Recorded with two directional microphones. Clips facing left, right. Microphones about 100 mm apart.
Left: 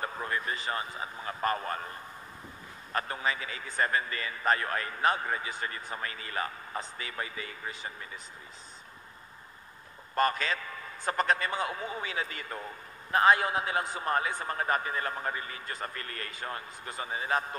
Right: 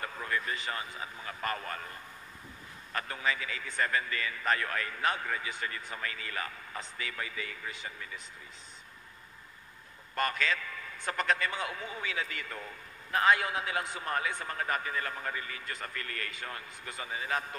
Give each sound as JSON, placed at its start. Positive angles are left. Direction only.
{"t": 0.0, "sound": "a man's voice", "side_deg": 35}
{"t": 10.1, "sound": "a man's voice", "side_deg": 35}